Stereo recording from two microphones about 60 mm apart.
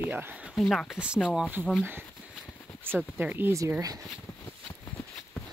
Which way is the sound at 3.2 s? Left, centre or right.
Right.